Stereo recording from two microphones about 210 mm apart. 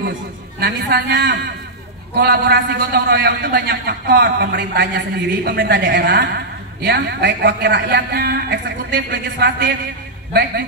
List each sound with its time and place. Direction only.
0.6 s a man's voice: 50° right (ahead or behind)